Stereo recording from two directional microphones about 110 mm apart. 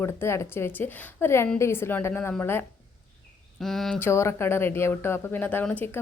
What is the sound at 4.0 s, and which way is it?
Speech, 25° left (ahead or behind).